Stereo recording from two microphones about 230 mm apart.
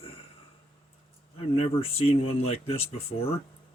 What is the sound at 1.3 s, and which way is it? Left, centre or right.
Speech, left.